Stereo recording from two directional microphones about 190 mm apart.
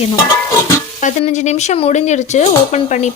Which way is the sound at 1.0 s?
35° left (ahead or behind).